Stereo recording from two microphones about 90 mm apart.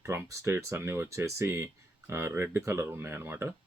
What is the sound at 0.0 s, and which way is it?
Speech, 30° right (ahead or behind).